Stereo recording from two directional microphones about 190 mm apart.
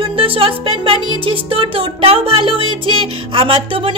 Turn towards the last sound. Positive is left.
turn(degrees=-30)  # may be behind; listen again after turning